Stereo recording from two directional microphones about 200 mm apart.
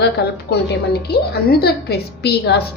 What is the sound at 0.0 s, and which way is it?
A woman's voice, 55° left (ahead or behind).